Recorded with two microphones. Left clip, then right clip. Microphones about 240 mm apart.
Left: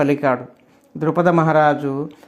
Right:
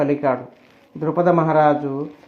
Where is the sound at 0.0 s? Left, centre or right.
Left.